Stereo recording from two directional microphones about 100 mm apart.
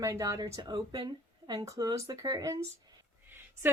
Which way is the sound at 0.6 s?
50° right (ahead or behind).